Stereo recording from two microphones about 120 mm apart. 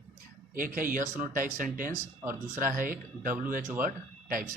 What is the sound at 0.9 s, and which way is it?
Speech, 90° right.